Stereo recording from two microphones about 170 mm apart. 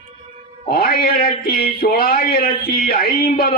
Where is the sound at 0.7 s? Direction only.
65° left (ahead or behind).